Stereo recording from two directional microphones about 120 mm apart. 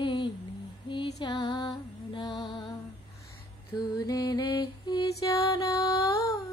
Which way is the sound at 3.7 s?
30° left (ahead or behind).